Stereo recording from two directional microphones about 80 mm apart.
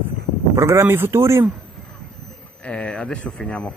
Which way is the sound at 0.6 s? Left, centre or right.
Right.